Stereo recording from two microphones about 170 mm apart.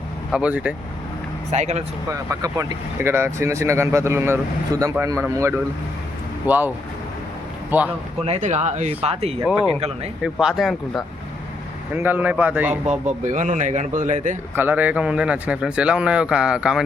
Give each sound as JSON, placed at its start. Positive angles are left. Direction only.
{"t": 0.3, "sound": "speech", "side_deg": -5}
{"t": 1.5, "sound": "speech", "side_deg": -40}
{"t": 2.0, "sound": "speech", "side_deg": -20}
{"t": 7.7, "sound": "speech", "side_deg": -10}
{"t": 8.2, "sound": "speech", "side_deg": -40}
{"t": 10.4, "sound": "speech", "side_deg": 0}
{"t": 11.9, "sound": "speech", "side_deg": -10}
{"t": 12.8, "sound": "speech", "side_deg": -40}
{"t": 14.5, "sound": "speech", "side_deg": -10}